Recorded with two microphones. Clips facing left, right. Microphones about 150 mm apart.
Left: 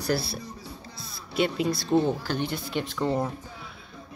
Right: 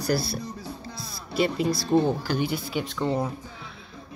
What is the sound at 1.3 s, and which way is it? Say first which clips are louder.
Speech: right 1 dB; centre (ahead or behind).